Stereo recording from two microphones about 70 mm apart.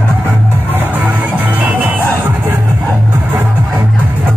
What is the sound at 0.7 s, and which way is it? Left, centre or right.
Music, right.